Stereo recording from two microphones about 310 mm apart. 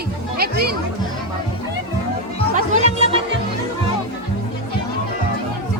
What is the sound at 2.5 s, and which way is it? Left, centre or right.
Music, right.